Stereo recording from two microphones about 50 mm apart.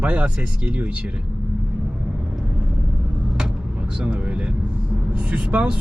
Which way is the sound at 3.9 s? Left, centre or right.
Right.